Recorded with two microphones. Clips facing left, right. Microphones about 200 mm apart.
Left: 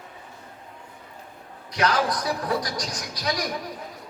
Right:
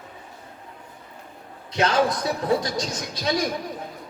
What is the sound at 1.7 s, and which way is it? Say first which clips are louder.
A man's voice: right 3 dB; 25° right (ahead or behind).